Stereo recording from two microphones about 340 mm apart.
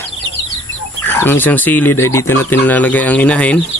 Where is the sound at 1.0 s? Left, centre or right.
Centre.